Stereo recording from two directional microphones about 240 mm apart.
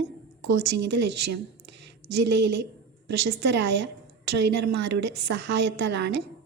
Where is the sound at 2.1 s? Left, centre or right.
Right.